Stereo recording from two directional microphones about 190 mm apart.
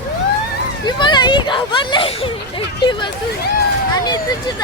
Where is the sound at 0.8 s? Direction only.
25° left (ahead or behind).